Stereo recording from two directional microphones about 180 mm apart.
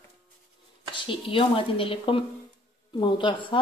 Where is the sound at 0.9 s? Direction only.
30° left (ahead or behind).